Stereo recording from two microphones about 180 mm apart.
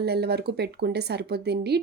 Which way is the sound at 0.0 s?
65° right (ahead or behind).